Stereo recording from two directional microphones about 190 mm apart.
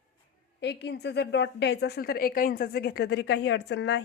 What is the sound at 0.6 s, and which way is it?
A woman's voice, 60° left (ahead or behind).